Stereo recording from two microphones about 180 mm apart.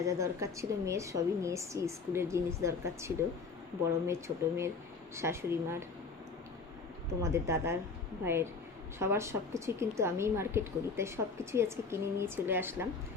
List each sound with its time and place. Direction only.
0.0 s a woman's voice: 15° right (ahead or behind)
7.2 s a woman's voice: 15° right (ahead or behind)